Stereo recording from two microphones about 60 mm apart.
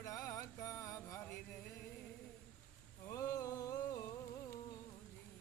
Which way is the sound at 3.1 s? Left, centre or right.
Left.